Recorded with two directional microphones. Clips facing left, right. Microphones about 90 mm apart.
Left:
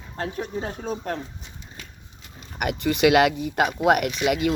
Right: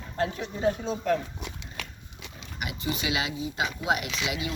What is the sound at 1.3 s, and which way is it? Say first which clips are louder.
Pig: right 4 dB; 80° right.